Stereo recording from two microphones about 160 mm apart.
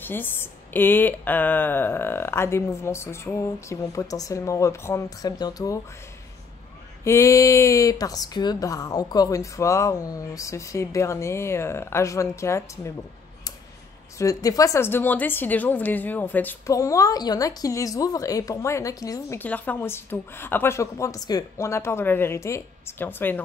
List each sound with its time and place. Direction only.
0.0 s speech: 10° left (ahead or behind)
7.1 s a woman's voice: 20° left (ahead or behind)
14.1 s speech: 20° left (ahead or behind)